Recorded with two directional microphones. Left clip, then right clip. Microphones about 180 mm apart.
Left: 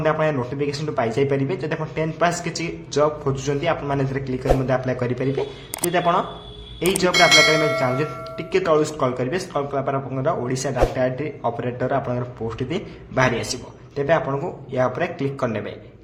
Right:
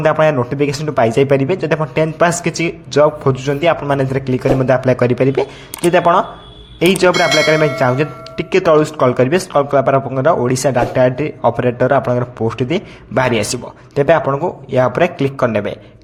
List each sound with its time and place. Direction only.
0.0 s speech: 40° right (ahead or behind)
7.1 s speech: centre (ahead or behind)
7.8 s speech: 40° right (ahead or behind)